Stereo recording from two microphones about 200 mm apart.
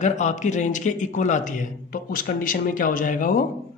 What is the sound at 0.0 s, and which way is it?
A man's voice, 35° left (ahead or behind).